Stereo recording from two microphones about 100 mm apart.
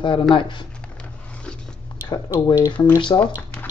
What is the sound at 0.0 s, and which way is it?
Speech, 55° left (ahead or behind).